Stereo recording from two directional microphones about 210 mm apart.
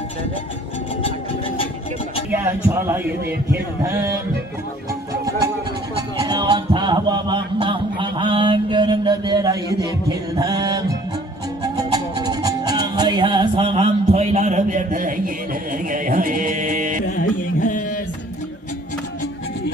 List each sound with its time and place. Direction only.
2.3 s a man's voice: 10° right (ahead or behind)
5.9 s speech: 20° right (ahead or behind)
11.6 s music: 20° right (ahead or behind); by 17.0 s 40° right (ahead or behind)
17.1 s music: 40° left (ahead or behind)